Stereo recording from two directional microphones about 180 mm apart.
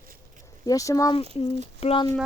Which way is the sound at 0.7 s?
20° left (ahead or behind).